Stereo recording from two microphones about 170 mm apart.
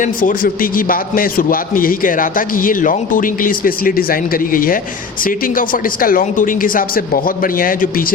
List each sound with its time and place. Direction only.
0.0 s a man's voice: 55° left (ahead or behind)